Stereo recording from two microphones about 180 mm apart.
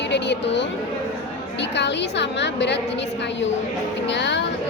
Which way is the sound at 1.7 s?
75° left (ahead or behind).